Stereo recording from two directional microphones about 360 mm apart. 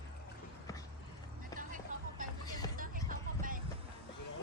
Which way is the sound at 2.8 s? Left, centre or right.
Right.